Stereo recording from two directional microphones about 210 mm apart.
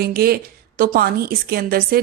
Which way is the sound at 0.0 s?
45° right (ahead or behind).